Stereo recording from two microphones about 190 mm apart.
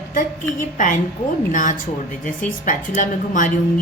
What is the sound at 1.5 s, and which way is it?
A woman's voice, 45° left (ahead or behind).